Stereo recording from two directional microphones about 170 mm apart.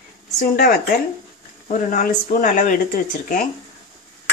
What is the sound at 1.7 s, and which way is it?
Speech, 50° left (ahead or behind).